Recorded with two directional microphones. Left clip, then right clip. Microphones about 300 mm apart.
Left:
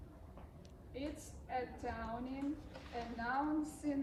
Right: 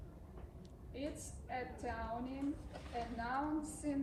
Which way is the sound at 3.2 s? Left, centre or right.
Centre.